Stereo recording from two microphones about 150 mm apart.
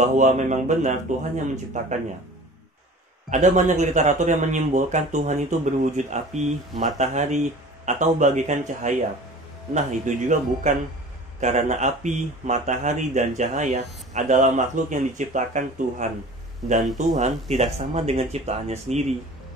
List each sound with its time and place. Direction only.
0.0 s speech: 55° right (ahead or behind)
3.3 s speech: 55° right (ahead or behind)
16.8 s speech: centre (ahead or behind)
17.2 s speech: 50° right (ahead or behind)